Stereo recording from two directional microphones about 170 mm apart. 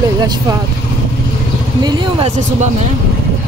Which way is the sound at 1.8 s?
30° right (ahead or behind).